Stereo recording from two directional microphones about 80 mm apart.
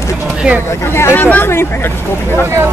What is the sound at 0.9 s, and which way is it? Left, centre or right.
Speech, left.